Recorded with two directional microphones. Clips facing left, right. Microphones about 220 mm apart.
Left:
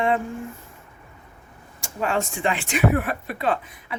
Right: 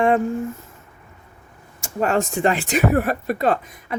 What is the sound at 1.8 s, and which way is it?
Speech, 45° right (ahead or behind).